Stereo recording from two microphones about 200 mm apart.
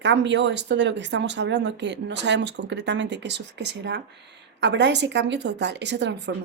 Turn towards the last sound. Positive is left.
turn(degrees=-60)  # may be behind; listen again after turning